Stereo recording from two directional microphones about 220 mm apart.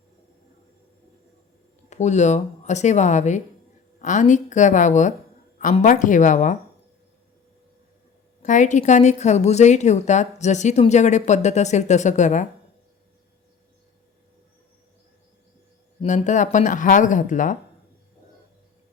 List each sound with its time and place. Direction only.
1.9 s a woman's voice: 30° left (ahead or behind)
8.4 s a woman's voice: 35° left (ahead or behind)
16.0 s a woman's voice: 35° left (ahead or behind)